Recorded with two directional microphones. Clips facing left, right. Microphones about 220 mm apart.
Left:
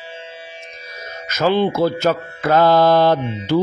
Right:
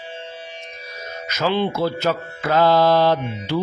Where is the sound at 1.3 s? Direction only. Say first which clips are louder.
Left 4 dB; 45° left (ahead or behind).